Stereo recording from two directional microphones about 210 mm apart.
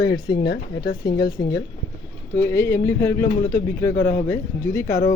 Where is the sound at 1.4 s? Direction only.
20° left (ahead or behind).